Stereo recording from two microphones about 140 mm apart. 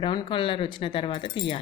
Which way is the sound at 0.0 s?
35° left (ahead or behind).